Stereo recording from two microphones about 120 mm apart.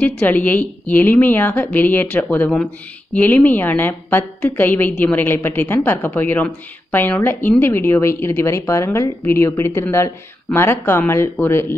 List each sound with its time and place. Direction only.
0.0 s speech: 15° left (ahead or behind)